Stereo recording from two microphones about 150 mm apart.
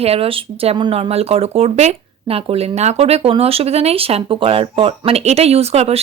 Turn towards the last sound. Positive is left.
turn(degrees=-45)  # may be behind; listen again after turning